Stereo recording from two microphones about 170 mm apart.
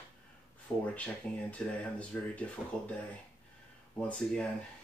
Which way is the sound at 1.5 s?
5° left (ahead or behind).